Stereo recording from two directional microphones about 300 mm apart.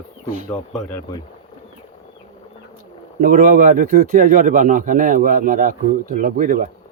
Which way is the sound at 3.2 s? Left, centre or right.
Right.